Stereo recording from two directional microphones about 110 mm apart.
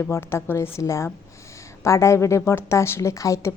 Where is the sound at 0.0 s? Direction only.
25° left (ahead or behind).